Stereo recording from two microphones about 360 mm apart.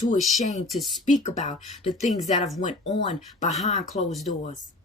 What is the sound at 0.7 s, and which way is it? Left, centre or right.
Speech, centre.